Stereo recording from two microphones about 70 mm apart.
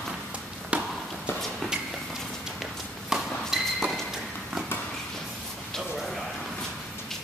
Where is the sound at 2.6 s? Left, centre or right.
Centre.